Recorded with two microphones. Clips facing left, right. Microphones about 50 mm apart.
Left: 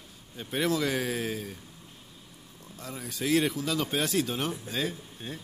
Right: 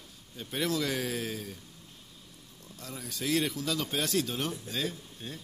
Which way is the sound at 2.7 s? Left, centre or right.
Centre.